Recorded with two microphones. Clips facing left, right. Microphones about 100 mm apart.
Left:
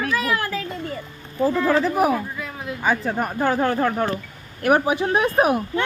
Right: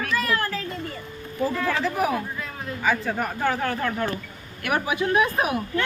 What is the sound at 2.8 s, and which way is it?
Speech, 35° left (ahead or behind).